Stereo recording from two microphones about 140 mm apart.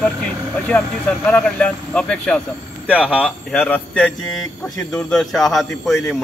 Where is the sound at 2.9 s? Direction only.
10° right (ahead or behind).